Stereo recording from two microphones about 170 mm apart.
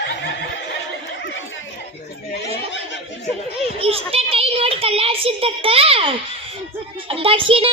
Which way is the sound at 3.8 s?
35° right (ahead or behind).